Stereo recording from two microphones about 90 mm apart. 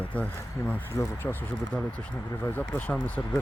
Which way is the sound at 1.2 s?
25° left (ahead or behind).